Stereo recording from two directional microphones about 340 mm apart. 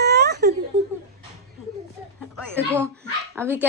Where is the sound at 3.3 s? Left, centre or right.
Centre.